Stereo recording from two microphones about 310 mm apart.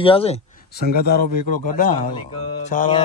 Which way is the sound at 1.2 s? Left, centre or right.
Right.